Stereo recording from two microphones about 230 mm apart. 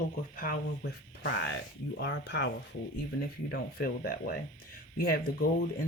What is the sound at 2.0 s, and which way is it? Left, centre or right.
Speech, left.